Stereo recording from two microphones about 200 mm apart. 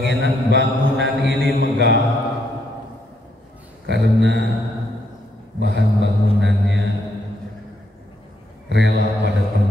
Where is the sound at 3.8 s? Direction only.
65° right (ahead or behind).